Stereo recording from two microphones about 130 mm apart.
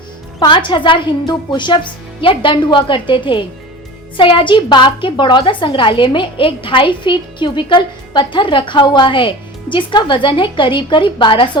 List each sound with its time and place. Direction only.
0.3 s a woman's voice: 35° left (ahead or behind)